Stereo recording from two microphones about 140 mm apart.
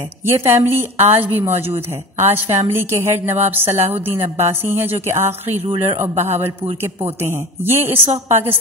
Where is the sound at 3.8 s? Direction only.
50° right (ahead or behind).